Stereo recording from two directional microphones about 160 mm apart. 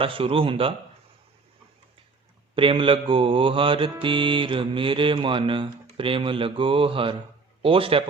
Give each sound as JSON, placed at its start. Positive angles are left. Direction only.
{"t": 0.0, "sound": "mantra", "side_deg": -35}
{"t": 2.6, "sound": "mantra", "side_deg": -35}